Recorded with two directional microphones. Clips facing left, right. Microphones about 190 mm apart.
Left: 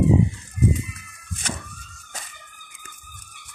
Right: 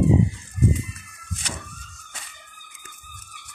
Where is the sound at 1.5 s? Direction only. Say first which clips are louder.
Left 4 dB; 50° left (ahead or behind).